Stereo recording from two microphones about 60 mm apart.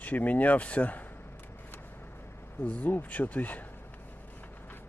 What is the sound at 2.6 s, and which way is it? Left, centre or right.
Speech, left.